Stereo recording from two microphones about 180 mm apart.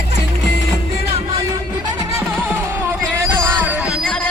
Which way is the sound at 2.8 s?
10° right (ahead or behind).